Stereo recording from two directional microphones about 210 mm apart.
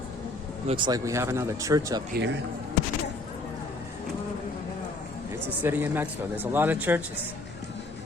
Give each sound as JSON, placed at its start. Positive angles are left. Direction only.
{"t": 0.7, "sound": "speech", "side_deg": -20}
{"t": 2.1, "sound": "speech", "side_deg": -55}
{"t": 5.6, "sound": "speech", "side_deg": -10}